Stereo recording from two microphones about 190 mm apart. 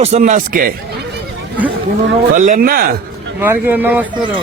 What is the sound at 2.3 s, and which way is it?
Speech, 40° right (ahead or behind).